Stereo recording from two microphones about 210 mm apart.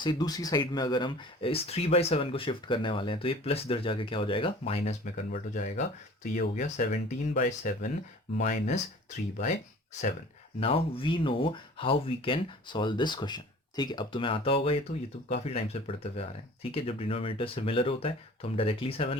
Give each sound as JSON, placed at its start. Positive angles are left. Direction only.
{"t": 0.0, "sound": "speech", "side_deg": 20}
{"t": 10.6, "sound": "speech", "side_deg": 25}